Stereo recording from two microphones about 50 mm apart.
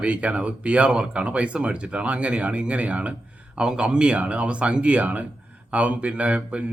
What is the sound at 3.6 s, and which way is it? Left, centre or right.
Speech, centre.